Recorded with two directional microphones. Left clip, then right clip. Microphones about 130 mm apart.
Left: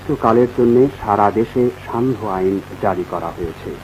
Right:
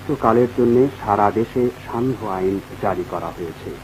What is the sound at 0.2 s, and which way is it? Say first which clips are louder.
Speech: left 2 dB; 35° right (ahead or behind).